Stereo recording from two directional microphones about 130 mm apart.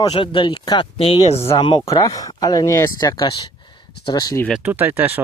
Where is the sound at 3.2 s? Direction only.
40° left (ahead or behind).